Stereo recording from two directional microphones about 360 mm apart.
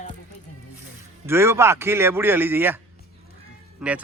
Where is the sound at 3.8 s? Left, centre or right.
Centre.